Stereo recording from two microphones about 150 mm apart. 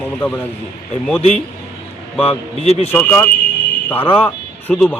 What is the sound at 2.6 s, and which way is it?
Speech, 45° left (ahead or behind).